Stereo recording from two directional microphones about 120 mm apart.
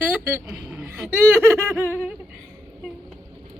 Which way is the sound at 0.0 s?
15° right (ahead or behind).